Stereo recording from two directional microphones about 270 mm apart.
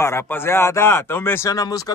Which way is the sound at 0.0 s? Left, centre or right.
Centre.